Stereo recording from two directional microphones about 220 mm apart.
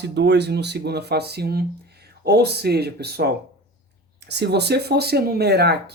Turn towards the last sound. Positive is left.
turn(degrees=-45)  # may be behind; listen again after turning